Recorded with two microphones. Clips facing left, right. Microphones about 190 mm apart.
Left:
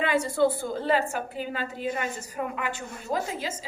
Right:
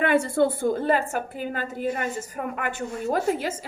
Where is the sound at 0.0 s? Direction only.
55° right (ahead or behind).